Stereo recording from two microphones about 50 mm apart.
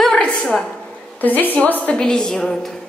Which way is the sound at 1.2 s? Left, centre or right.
Left.